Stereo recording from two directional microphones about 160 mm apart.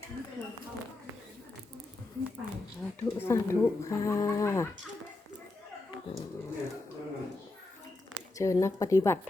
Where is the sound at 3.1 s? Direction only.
15° left (ahead or behind).